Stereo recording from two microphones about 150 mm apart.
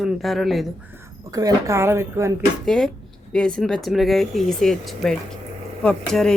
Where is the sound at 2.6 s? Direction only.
Centre (ahead or behind).